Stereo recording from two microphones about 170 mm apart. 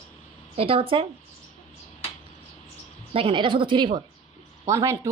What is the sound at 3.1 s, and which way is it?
Speech, 30° right (ahead or behind).